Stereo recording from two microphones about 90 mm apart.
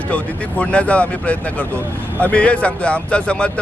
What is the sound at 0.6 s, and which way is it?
Speech, 15° left (ahead or behind).